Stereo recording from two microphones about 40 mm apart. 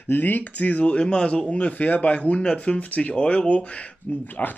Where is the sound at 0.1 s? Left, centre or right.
Left.